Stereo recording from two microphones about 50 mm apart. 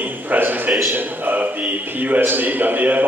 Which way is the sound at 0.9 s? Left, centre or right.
Right.